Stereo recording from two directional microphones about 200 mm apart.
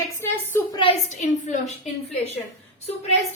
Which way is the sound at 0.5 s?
25° left (ahead or behind).